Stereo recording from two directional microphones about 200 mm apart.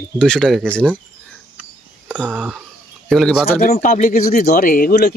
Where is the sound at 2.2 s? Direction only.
5° right (ahead or behind).